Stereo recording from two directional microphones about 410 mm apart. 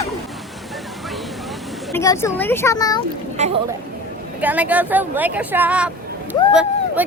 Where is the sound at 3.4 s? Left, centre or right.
Centre.